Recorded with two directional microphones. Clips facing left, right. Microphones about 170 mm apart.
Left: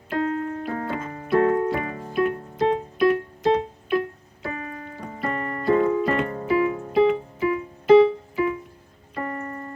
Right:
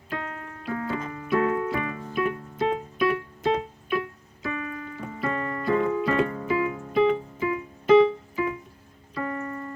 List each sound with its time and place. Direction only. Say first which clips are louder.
0.1 s keyboard: left 10 dB; 40° left (ahead or behind)